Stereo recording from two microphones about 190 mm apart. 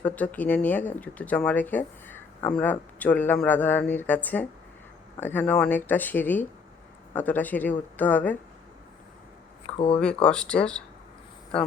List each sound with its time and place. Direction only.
0.0 s speech: 10° left (ahead or behind)
9.7 s speech: 30° left (ahead or behind)
10.0 s speech: 5° left (ahead or behind)